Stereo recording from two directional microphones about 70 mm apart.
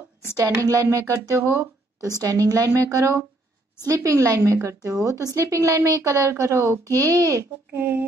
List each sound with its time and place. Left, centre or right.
0.4 s a woman's voice: right
2.0 s a woman's voice: right
6.9 s a woman's voice: right
7.7 s speech: right